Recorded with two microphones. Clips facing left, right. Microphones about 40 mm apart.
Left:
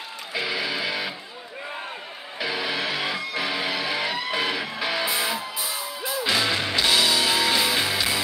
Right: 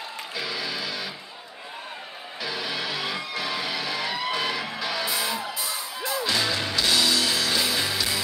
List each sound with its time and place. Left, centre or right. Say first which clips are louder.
0.3 s music: left 5 dB; left
2.4 s music: left 4 dB; centre